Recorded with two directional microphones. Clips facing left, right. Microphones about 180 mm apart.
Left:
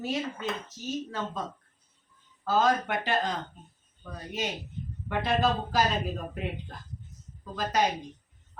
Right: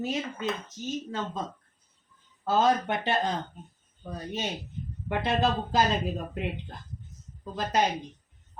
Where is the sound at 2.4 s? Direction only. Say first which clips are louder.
Right 1 dB; 25° right (ahead or behind).